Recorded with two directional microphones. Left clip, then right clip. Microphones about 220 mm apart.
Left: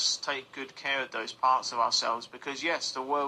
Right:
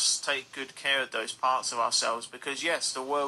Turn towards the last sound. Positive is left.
turn(degrees=-15)  # may be behind; listen again after turning